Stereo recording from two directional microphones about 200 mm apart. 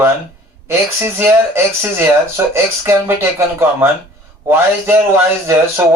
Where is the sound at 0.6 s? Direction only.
15° right (ahead or behind).